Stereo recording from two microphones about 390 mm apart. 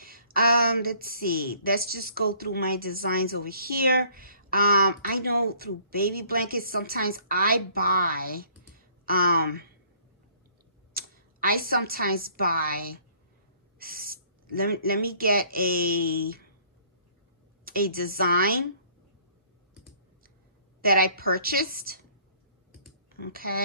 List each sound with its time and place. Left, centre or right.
0.0 s a woman's voice: right
10.9 s a sound: right
12.4 s a woman's voice: right
17.6 s a woman's voice: right
20.8 s a woman's voice: right